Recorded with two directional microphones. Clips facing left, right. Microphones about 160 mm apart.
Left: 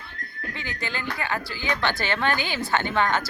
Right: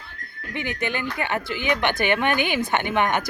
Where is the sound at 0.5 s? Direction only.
20° right (ahead or behind).